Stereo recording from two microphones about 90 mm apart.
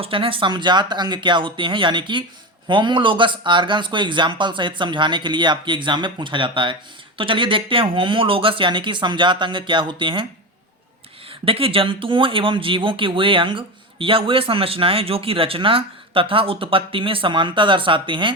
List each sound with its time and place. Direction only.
0.0 s speech: 85° right; by 10.2 s 65° right (ahead or behind)
11.3 s speech: 90° right; by 18.3 s 65° right (ahead or behind)